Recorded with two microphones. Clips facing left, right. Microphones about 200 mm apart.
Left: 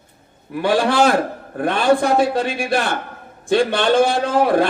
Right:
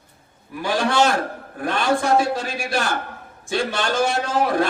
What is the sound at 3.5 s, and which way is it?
A man's voice, 60° left (ahead or behind).